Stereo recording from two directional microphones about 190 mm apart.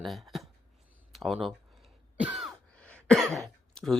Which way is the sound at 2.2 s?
5° right (ahead or behind).